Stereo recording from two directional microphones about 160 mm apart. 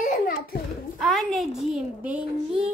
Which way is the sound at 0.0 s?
65° left (ahead or behind).